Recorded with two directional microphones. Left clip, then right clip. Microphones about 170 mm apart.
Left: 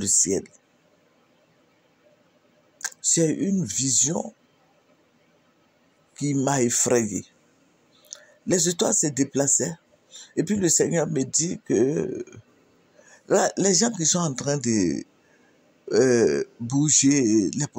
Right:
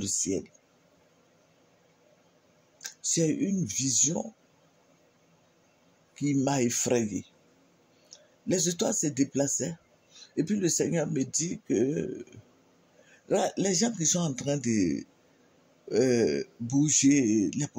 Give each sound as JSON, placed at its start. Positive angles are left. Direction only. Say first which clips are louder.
{"t": 0.0, "sound": "speech", "louder": "left 7 dB", "side_deg": 30}
{"t": 2.8, "sound": "a sound", "louder": "left 6 dB", "side_deg": 25}
{"t": 3.6, "sound": "speech", "louder": "left 3 dB", "side_deg": 25}
{"t": 6.1, "sound": "speech", "louder": "left 4 dB", "side_deg": 25}